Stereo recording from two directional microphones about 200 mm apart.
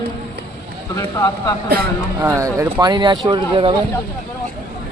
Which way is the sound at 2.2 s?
15° right (ahead or behind).